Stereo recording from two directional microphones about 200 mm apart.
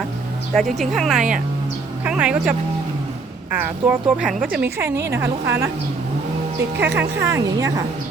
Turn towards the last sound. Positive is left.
turn(degrees=-15)  # may be behind; listen again after turning